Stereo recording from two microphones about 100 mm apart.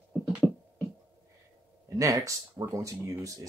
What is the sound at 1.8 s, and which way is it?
Speech, 35° right (ahead or behind).